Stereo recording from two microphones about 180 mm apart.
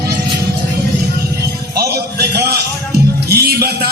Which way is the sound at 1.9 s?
65° right (ahead or behind).